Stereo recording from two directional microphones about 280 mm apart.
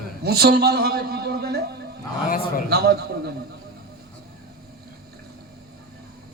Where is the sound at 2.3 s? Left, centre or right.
Left.